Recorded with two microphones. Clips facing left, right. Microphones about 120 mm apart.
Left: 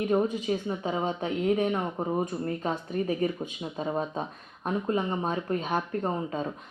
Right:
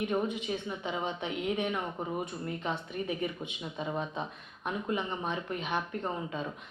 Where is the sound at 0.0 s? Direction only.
35° left (ahead or behind).